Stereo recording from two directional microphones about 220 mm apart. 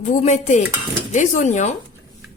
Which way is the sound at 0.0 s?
30° left (ahead or behind).